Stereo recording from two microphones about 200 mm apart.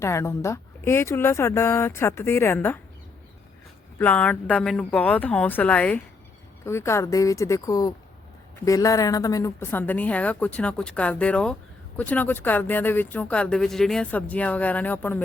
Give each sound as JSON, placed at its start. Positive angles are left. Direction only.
{"t": 0.0, "sound": "speech", "side_deg": 15}
{"t": 3.9, "sound": "speech", "side_deg": 10}